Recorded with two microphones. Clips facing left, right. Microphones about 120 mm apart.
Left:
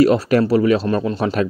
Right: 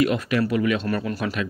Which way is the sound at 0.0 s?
35° left (ahead or behind).